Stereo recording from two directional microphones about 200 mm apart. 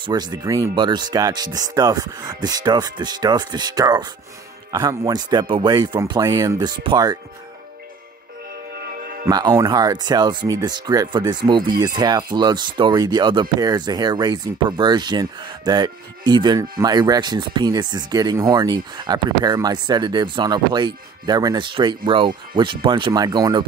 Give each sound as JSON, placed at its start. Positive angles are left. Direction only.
{"t": 0.0, "sound": "speech", "side_deg": -20}
{"t": 9.3, "sound": "speech", "side_deg": -20}